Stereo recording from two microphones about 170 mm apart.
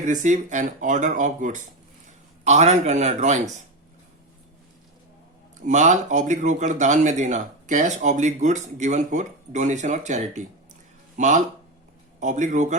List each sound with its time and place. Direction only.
0.0 s a man's voice: 45° right (ahead or behind)
5.5 s speech: 45° right (ahead or behind)